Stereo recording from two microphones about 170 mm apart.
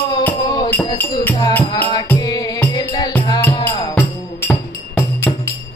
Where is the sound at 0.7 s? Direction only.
10° left (ahead or behind).